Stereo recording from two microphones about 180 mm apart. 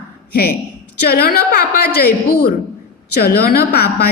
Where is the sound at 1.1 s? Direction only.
60° left (ahead or behind).